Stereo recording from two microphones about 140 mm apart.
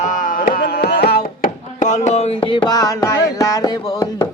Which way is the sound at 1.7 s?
60° left (ahead or behind).